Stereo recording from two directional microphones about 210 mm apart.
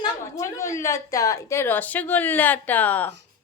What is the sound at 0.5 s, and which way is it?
Speech, 15° left (ahead or behind).